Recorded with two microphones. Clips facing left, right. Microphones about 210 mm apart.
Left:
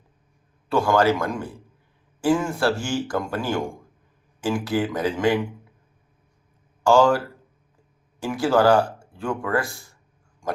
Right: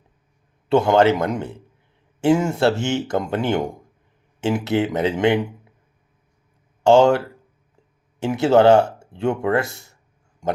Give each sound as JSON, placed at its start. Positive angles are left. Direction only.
{"t": 0.7, "sound": "speech", "side_deg": -25}
{"t": 6.8, "sound": "speech", "side_deg": -25}
{"t": 8.2, "sound": "speech", "side_deg": -25}